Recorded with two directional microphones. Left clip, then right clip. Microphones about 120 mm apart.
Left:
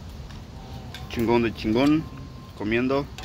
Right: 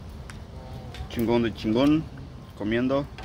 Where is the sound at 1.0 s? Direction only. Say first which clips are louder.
Left 2 dB; 15° right (ahead or behind).